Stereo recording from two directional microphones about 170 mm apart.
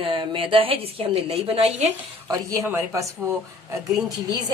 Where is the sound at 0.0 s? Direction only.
30° right (ahead or behind).